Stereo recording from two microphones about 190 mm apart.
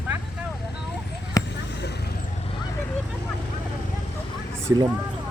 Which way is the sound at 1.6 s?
60° left (ahead or behind).